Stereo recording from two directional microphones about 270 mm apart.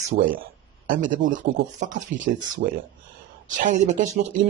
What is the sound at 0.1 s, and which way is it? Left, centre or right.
Speech, right.